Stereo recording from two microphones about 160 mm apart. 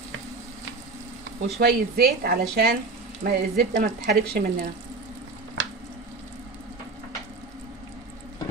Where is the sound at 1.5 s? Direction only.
75° right (ahead or behind).